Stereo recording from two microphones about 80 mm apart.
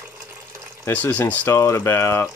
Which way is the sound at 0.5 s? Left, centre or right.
Right.